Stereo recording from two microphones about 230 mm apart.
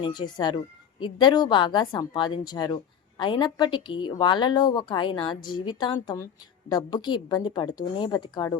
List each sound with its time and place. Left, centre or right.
0.0 s speech: centre